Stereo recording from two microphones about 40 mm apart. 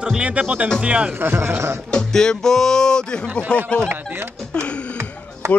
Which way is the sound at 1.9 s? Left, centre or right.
Centre.